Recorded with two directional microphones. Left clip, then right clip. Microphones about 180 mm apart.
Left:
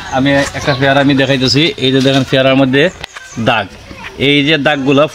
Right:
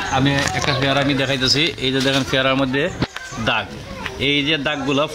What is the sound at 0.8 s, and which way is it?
Speech, 30° left (ahead or behind).